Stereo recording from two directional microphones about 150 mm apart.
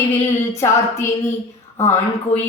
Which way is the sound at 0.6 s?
20° left (ahead or behind).